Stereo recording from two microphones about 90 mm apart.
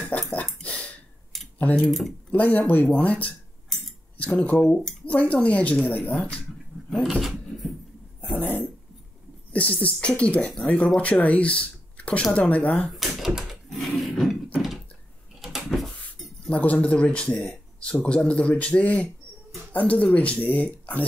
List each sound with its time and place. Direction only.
0.3 s a sound: 15° left (ahead or behind)
1.6 s a man's voice: 20° left (ahead or behind)
1.9 s speech: centre (ahead or behind)
2.3 s a man's voice: 15° left (ahead or behind)
4.4 s a man's voice: 15° left (ahead or behind)
6.9 s drawer open or close: 5° left (ahead or behind)
8.2 s dog: 15° left (ahead or behind)
9.5 s a man's voice: 15° left (ahead or behind)
12.9 s typewriter: centre (ahead or behind)
15.4 s a sound: centre (ahead or behind)
16.4 s a man's voice: 15° left (ahead or behind)